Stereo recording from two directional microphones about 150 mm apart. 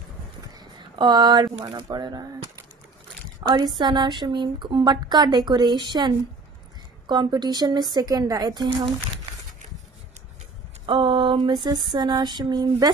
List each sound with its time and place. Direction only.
0.6 s a sound: 30° right (ahead or behind)
1.7 s a woman's voice: 25° right (ahead or behind)
3.4 s a woman's voice: 25° right (ahead or behind)
10.9 s mantra: 35° right (ahead or behind)
11.9 s a woman's voice: 30° right (ahead or behind)